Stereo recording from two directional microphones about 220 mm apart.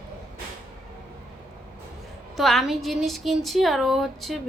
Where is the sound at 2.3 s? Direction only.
Centre (ahead or behind).